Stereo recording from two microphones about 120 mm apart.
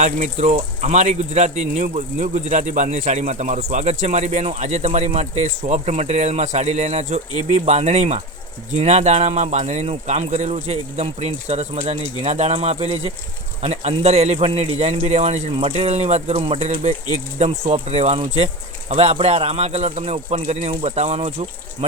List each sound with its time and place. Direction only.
0.0 s speech: 75° right (ahead or behind)
15.5 s speech: 50° right (ahead or behind)
18.9 s speech: 70° right (ahead or behind)